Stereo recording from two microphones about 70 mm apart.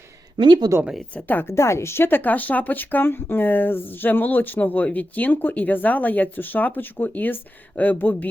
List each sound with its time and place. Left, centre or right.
0.3 s speech: right
1.1 s speech: left
1.5 s speech: left